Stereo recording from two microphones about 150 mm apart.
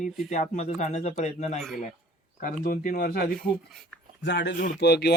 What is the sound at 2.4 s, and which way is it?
Speech, 60° left (ahead or behind).